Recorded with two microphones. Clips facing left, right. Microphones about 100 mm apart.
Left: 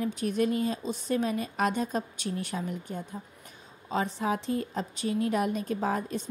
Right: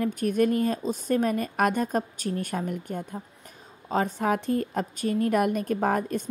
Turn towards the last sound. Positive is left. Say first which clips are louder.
# right 4 dB
turn(degrees=-55)  # may be behind; listen again after turning